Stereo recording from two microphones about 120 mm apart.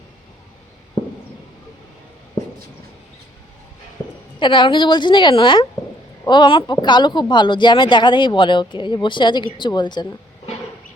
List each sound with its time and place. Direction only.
4.4 s speech: 40° left (ahead or behind)